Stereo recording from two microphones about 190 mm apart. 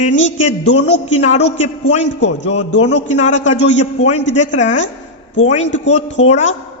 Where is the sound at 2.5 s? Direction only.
35° left (ahead or behind).